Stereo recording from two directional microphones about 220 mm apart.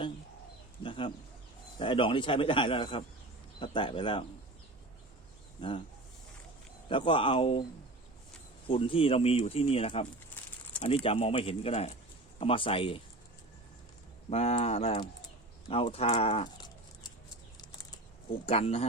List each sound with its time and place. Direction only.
0.8 s speech: 25° left (ahead or behind)
5.5 s speech: 25° left (ahead or behind)
6.8 s speech: 25° left (ahead or behind)
8.6 s speech: 25° left (ahead or behind)
14.3 s speech: 30° left (ahead or behind)
18.4 s speech: 25° left (ahead or behind)